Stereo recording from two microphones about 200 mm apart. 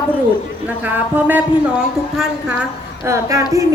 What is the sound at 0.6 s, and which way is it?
A woman's voice, 10° right (ahead or behind).